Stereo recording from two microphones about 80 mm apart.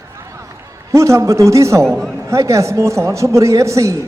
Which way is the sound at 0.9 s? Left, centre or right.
Right.